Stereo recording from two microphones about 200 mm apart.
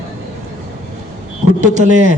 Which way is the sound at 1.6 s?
35° right (ahead or behind).